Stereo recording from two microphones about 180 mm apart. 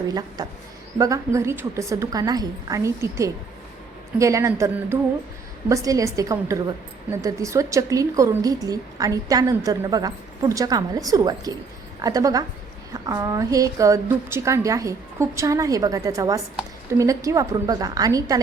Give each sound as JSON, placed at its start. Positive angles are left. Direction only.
{"t": 0.1, "sound": "a woman's voice", "side_deg": -20}